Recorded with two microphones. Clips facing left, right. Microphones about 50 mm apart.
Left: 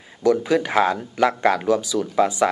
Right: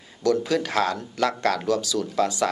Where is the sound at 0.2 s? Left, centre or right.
Centre.